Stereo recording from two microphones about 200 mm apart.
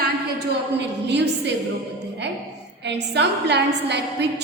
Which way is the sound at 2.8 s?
60° right (ahead or behind).